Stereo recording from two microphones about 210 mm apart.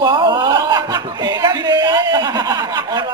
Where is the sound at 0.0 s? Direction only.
20° right (ahead or behind).